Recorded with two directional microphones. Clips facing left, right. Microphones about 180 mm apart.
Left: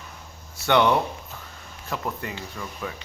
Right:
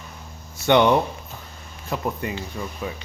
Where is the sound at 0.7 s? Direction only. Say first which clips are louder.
Right 3 dB; 20° right (ahead or behind).